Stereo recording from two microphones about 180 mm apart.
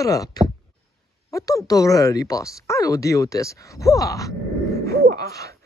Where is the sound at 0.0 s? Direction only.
20° left (ahead or behind).